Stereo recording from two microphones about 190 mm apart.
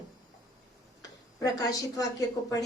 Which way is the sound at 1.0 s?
20° left (ahead or behind).